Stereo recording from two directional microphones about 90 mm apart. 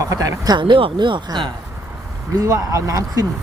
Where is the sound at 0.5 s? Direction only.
60° right (ahead or behind).